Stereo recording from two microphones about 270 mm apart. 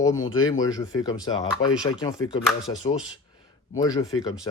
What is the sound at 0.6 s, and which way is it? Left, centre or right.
Speech, centre.